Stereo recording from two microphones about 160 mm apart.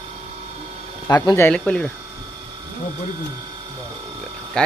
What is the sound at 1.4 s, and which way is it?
Speech, 10° left (ahead or behind).